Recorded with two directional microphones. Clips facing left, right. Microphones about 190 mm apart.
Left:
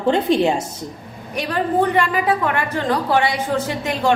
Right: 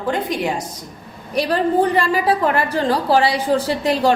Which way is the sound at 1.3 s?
35° right (ahead or behind).